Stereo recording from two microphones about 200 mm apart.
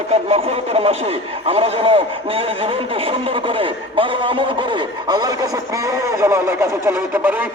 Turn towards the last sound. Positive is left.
turn(degrees=-10)  # may be behind; listen again after turning